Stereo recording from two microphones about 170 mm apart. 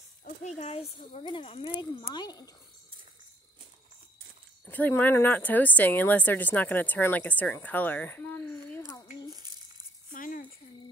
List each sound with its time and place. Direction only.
0.2 s speech: 45° left (ahead or behind); by 2.5 s 25° left (ahead or behind)
4.6 s a woman's voice: 10° left (ahead or behind)
10.1 s a sound: 50° left (ahead or behind)